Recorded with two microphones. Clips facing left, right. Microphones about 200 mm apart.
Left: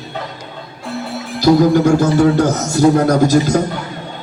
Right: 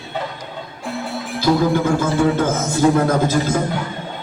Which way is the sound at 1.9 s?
40° left (ahead or behind).